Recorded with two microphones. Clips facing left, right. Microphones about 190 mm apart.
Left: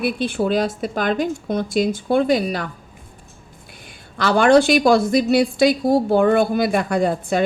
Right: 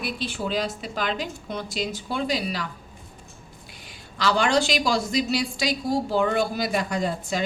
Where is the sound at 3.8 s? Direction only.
55° left (ahead or behind).